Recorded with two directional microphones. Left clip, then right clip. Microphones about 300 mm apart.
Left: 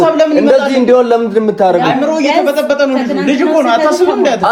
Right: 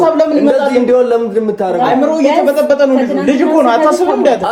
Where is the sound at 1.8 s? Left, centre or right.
Left.